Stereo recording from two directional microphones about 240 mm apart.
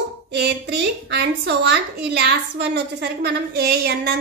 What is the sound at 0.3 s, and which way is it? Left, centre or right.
A woman's voice, right.